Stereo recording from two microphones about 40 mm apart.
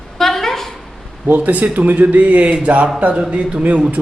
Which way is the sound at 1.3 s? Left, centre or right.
Right.